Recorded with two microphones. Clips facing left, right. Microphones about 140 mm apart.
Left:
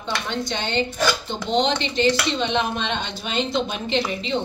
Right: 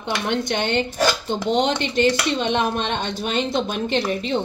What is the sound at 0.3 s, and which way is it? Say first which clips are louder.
A woman's voice: right 6 dB; 60° right (ahead or behind).